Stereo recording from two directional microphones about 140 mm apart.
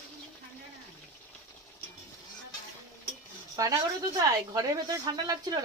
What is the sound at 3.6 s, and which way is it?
Speech, 25° right (ahead or behind).